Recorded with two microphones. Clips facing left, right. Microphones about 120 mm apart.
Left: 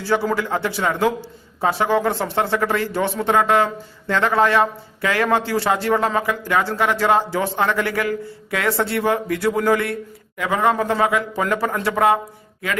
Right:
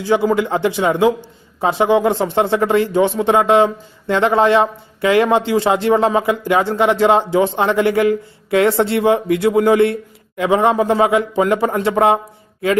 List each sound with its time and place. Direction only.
0.0 s a man's voice: 15° right (ahead or behind)